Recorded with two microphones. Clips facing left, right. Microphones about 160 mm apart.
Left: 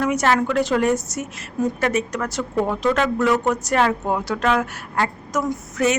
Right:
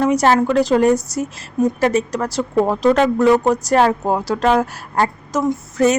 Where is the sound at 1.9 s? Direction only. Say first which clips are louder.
Right 4 dB; 35° right (ahead or behind).